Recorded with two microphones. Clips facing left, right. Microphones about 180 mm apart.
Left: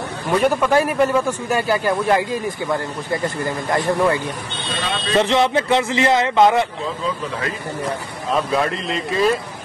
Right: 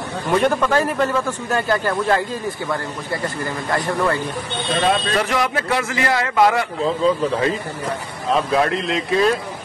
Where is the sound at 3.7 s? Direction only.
15° left (ahead or behind).